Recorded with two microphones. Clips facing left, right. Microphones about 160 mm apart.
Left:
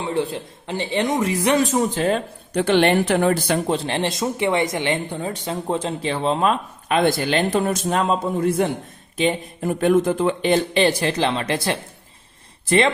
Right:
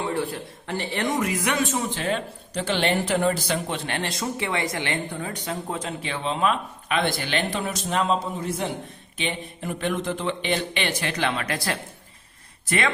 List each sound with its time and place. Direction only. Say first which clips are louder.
0.0 s speech: left 3 dB; 20° left (ahead or behind); by 2.2 s 40° left (ahead or behind)
2.5 s speech: left 7 dB; 60° left (ahead or behind)
3.7 s a woman's voice: left 7 dB; 30° left (ahead or behind); by 8.7 s 55° left (ahead or behind)
9.1 s a woman's voice: left 9 dB; 40° left (ahead or behind)